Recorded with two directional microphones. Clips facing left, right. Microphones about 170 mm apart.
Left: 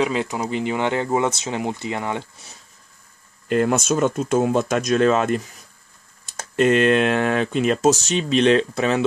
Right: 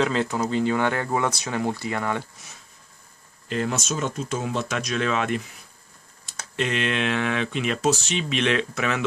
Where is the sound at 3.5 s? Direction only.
55° left (ahead or behind).